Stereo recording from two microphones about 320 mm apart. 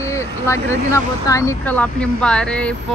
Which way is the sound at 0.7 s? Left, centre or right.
Centre.